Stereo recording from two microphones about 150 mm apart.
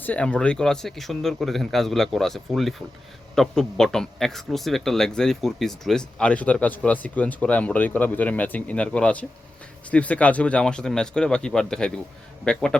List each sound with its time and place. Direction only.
0.0 s a man's voice: 10° left (ahead or behind)